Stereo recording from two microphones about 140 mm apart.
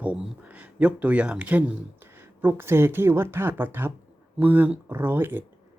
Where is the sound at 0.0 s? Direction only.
10° right (ahead or behind).